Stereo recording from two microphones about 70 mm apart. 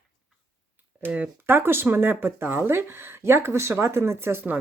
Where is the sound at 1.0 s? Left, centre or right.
Right.